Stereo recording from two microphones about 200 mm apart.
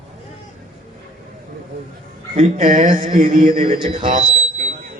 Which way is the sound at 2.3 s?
40° right (ahead or behind).